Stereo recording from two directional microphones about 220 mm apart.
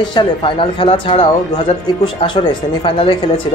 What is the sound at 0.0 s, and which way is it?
Speech, 20° left (ahead or behind).